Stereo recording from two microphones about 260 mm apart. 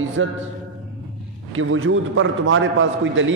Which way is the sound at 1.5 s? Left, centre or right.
Right.